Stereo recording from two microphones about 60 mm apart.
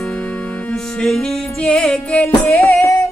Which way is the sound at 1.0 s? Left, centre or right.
Centre.